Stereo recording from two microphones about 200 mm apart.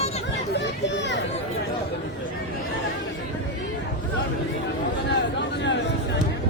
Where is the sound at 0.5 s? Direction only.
60° left (ahead or behind).